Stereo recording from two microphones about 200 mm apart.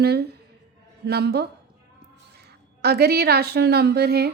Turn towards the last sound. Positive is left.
turn(degrees=-50)  # may be behind; listen again after turning